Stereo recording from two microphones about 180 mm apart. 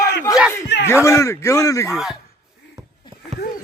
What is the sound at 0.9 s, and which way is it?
Speech, 15° left (ahead or behind).